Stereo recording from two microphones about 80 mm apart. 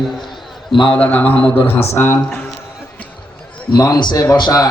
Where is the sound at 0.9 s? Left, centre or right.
Centre.